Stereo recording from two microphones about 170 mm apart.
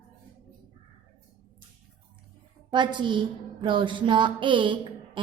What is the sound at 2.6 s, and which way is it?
A woman's voice, 25° right (ahead or behind).